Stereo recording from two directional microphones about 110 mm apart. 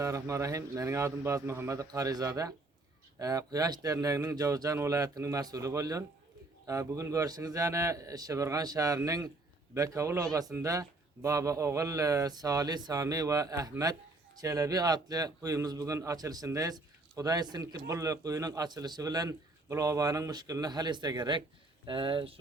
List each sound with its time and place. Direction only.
0.0 s a man's voice: 30° right (ahead or behind); by 22.4 s 55° right (ahead or behind)